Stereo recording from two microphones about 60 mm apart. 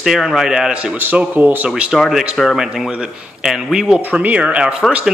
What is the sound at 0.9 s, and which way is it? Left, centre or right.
Speech, right.